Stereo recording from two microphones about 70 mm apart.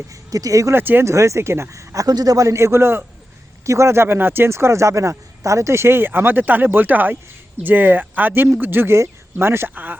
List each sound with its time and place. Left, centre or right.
0.3 s speech: right
0.7 s speech: right
1.0 s speech: right
2.5 s speech: right